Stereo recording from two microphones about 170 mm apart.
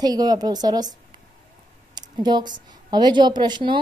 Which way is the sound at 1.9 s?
25° right (ahead or behind).